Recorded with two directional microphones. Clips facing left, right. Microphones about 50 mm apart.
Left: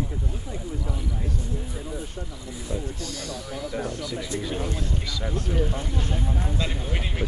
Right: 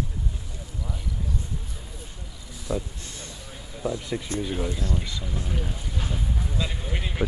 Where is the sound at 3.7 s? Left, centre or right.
Left.